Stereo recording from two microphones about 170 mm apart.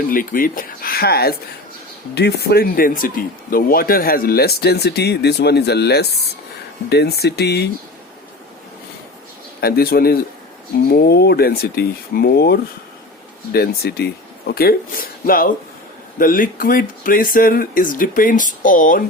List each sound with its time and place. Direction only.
0.1 s speech: 55° left (ahead or behind); by 7.7 s 75° left (ahead or behind)
9.6 s speech: 65° left (ahead or behind)